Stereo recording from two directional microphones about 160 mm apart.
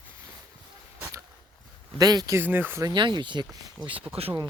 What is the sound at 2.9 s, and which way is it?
Speech, 30° right (ahead or behind).